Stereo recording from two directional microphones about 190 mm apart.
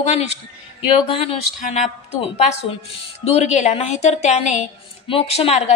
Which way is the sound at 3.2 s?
35° left (ahead or behind).